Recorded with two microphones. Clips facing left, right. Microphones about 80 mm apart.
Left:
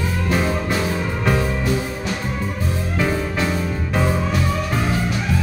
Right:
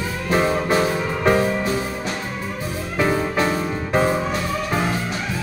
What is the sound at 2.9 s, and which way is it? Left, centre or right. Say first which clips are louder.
Music: right 3 dB; right.